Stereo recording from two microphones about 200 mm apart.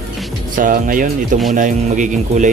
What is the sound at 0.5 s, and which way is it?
Speech, 40° right (ahead or behind).